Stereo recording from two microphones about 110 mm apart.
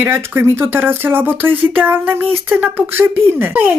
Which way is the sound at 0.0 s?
20° right (ahead or behind).